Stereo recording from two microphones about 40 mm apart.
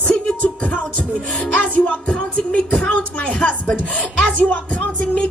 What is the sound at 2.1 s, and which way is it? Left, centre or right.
Music, left.